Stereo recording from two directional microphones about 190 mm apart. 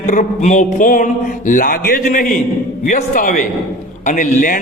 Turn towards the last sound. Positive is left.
turn(degrees=45)  # may be behind; listen again after turning